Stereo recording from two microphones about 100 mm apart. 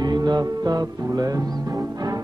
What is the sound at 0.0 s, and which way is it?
Music, 45° right (ahead or behind).